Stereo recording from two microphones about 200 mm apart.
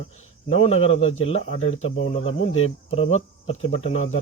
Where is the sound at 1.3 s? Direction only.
35° left (ahead or behind).